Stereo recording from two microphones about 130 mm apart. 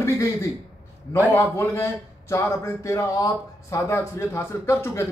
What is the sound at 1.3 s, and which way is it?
A man's voice, 15° left (ahead or behind).